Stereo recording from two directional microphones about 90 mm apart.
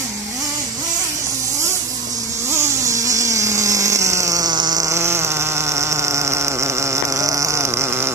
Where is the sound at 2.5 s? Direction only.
35° right (ahead or behind).